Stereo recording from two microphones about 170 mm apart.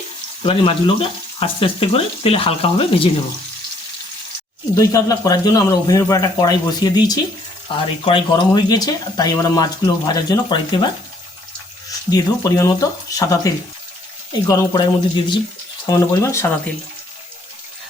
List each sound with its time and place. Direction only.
0.4 s speech: 35° left (ahead or behind)
4.7 s speech: 20° left (ahead or behind)
12.1 s speech: 20° left (ahead or behind)